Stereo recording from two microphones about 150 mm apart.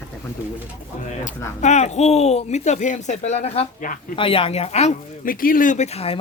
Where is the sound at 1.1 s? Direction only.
50° left (ahead or behind).